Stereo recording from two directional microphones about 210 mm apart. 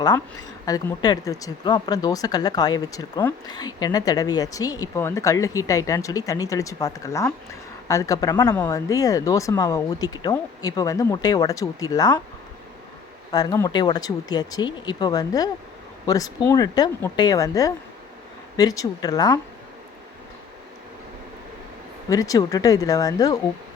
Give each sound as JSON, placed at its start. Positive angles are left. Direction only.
{"t": 0.6, "sound": "speech", "side_deg": 15}
{"t": 13.3, "sound": "speech", "side_deg": 15}
{"t": 22.1, "sound": "speech", "side_deg": 15}